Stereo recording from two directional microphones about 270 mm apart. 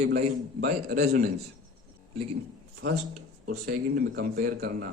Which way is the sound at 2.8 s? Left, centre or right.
Right.